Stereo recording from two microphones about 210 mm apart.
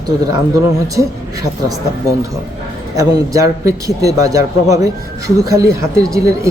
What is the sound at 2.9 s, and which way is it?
Speech, 15° right (ahead or behind).